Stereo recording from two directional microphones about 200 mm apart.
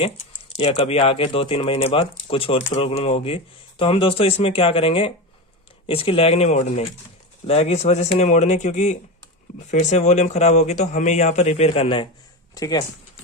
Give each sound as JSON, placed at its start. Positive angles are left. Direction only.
{"t": 0.0, "sound": "a man's voice", "side_deg": 30}
{"t": 12.5, "sound": "speech", "side_deg": 15}